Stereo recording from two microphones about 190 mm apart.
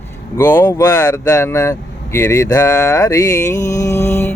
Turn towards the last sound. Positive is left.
turn(degrees=10)  # may be behind; listen again after turning